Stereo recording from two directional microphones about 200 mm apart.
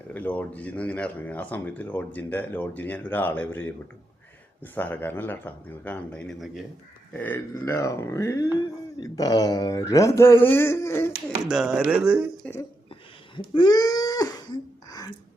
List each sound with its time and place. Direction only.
0.1 s speech: 10° left (ahead or behind)
11.4 s speech: 5° right (ahead or behind)
12.9 s a sound: 25° left (ahead or behind)